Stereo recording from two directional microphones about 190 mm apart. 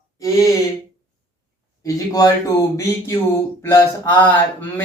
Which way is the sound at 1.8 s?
20° left (ahead or behind).